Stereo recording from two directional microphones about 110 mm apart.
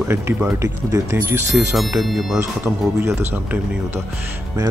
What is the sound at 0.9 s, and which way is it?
Speech, 25° right (ahead or behind).